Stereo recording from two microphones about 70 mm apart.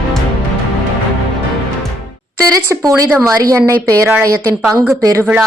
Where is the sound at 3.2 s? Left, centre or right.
Right.